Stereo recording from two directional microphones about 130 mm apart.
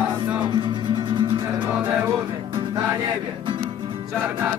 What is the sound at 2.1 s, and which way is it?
Music, 40° right (ahead or behind).